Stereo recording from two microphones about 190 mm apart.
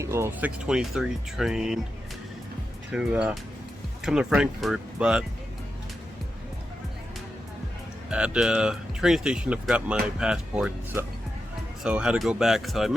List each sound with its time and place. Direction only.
0.0 s speech: 15° right (ahead or behind)
2.9 s speech: 5° right (ahead or behind)
8.1 s speech: 5° right (ahead or behind)